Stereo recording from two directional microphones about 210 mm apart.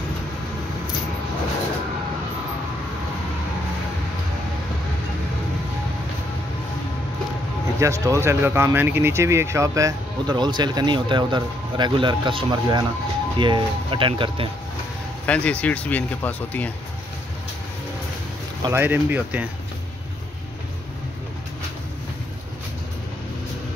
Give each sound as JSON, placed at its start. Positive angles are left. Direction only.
{"t": 7.8, "sound": "speech", "side_deg": -15}
{"t": 15.2, "sound": "speech", "side_deg": 5}
{"t": 18.6, "sound": "speech", "side_deg": -10}